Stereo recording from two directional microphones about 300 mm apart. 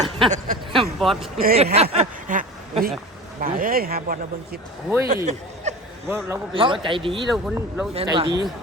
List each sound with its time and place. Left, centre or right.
0.2 s a sound: right
0.8 s a sound: centre
1.4 s speech: right
6.1 s a man's voice: centre
7.3 s speech: centre
7.9 s a man's voice: centre